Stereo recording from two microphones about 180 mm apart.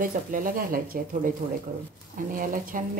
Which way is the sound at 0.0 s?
50° right (ahead or behind).